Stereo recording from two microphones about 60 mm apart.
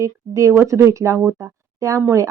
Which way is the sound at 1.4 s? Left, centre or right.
Right.